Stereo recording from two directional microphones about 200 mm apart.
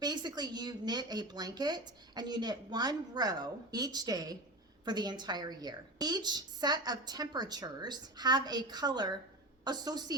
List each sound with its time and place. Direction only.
0.0 s speech: 20° right (ahead or behind)